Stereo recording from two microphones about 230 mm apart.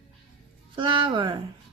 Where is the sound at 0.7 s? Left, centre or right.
Right.